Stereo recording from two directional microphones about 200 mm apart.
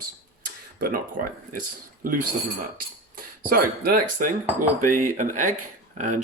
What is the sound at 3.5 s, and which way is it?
Speech, 45° right (ahead or behind).